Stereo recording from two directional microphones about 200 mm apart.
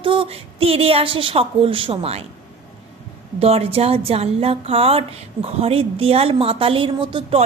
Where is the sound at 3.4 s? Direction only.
30° right (ahead or behind).